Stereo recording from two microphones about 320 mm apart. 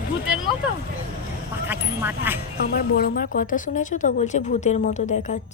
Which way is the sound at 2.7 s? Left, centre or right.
Left.